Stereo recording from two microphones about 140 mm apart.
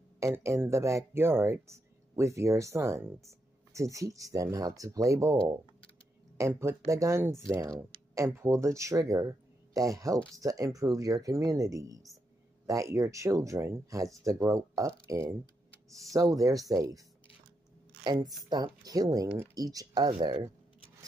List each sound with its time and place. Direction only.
0.2 s speech: 20° right (ahead or behind)
18.0 s speech: 30° right (ahead or behind)
20.1 s speech: 40° right (ahead or behind)